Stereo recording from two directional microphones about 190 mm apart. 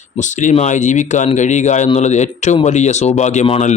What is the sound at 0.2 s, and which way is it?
Speech, 40° left (ahead or behind).